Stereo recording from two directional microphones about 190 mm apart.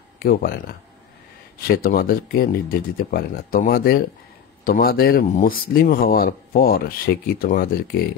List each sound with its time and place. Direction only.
0.2 s speech: 50° left (ahead or behind)